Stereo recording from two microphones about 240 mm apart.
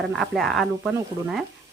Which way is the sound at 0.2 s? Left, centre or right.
Centre.